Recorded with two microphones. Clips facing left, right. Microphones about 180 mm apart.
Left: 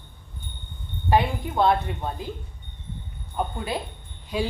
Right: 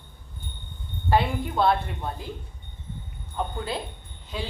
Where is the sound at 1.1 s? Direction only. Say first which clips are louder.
Left 1 dB; 15° left (ahead or behind).